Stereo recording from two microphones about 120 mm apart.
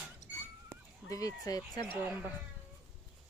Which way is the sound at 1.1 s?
30° left (ahead or behind).